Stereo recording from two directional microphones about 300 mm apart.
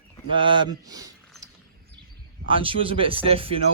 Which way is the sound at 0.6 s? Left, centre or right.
Centre.